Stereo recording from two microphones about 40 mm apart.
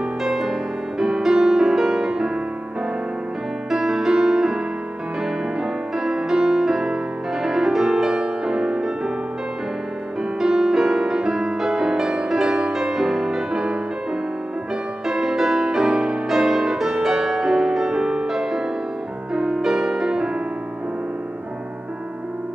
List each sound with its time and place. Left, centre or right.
0.2 s music: centre
3.7 s music: centre
10.4 s music: centre
15.0 s music: centre
18.2 s music: centre